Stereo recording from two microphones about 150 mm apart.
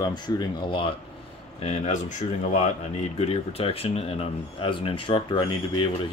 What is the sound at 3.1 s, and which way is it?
Speech, 40° left (ahead or behind).